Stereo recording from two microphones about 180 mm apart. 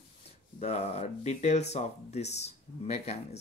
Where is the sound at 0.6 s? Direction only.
35° left (ahead or behind).